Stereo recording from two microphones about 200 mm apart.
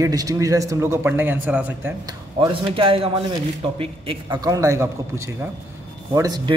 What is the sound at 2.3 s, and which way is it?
A man's voice, 25° right (ahead or behind).